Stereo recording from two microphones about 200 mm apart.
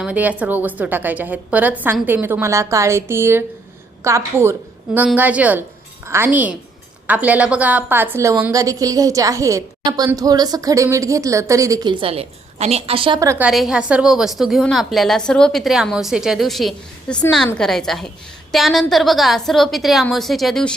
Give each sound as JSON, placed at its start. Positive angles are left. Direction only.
{"t": 0.0, "sound": "a woman's voice", "side_deg": -5}
{"t": 13.5, "sound": "a woman's voice", "side_deg": 0}